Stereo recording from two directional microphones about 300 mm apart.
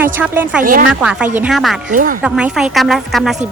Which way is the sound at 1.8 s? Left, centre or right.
Right.